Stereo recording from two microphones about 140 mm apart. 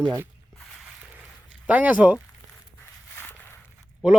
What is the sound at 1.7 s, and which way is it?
Speech, 10° right (ahead or behind).